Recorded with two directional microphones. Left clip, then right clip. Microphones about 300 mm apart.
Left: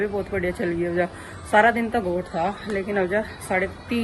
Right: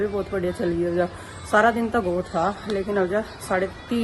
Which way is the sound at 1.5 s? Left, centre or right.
Centre.